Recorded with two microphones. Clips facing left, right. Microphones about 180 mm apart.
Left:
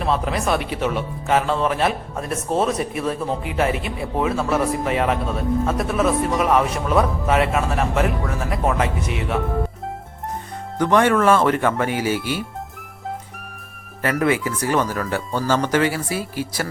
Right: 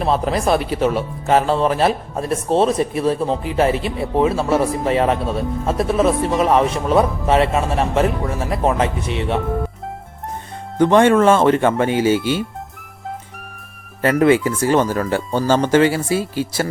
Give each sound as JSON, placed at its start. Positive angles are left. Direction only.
{"t": 0.0, "sound": "speech", "side_deg": -35}
{"t": 10.8, "sound": "speech", "side_deg": -25}
{"t": 14.0, "sound": "speech", "side_deg": -25}